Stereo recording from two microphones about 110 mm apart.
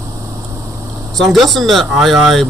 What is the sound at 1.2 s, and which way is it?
Speech, centre (ahead or behind).